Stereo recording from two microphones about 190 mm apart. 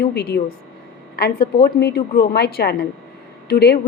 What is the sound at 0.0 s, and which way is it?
A woman's voice, 60° left (ahead or behind).